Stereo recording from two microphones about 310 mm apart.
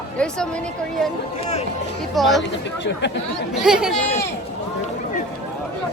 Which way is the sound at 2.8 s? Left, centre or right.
Left.